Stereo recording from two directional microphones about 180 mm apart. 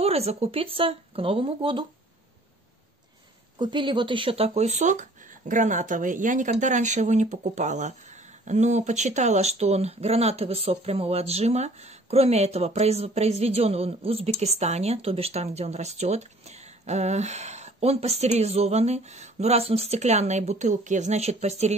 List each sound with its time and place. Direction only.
0.0 s speech: 35° right (ahead or behind)
3.5 s speech: 25° right (ahead or behind)